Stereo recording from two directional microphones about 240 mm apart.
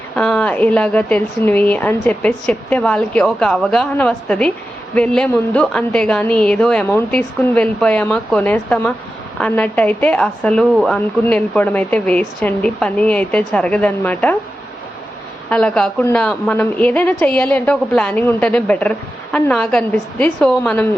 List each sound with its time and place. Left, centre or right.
0.2 s a woman's voice: centre
15.4 s a woman's voice: centre